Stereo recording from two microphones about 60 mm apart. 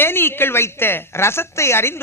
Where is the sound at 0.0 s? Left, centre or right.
Left.